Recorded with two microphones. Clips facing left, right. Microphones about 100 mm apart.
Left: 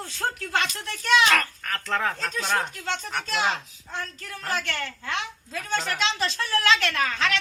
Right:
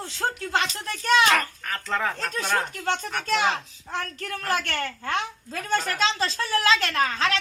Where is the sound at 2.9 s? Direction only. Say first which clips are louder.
Right 4 dB; 55° right (ahead or behind).